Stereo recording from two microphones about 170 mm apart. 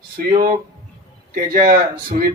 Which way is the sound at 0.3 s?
55° right (ahead or behind).